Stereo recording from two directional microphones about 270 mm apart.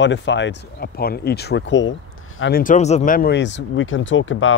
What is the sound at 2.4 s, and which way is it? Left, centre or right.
Speech, left.